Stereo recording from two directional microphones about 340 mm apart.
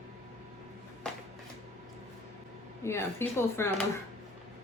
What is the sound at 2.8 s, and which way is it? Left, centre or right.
Speech, centre.